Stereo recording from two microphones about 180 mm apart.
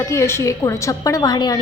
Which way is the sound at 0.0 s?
15° left (ahead or behind).